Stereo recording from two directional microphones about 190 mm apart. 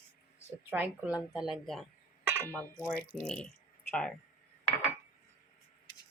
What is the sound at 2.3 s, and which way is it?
Cutlery, 15° right (ahead or behind).